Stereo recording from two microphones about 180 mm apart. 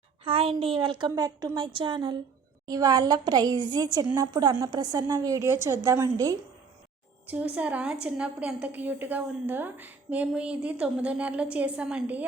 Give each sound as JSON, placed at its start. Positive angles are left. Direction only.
{"t": 0.3, "sound": "a woman's voice", "side_deg": -30}